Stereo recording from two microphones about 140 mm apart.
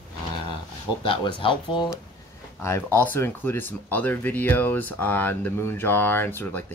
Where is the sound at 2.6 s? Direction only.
15° left (ahead or behind).